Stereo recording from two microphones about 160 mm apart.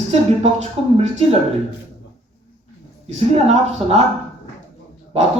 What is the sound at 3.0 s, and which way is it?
Speech, 45° right (ahead or behind).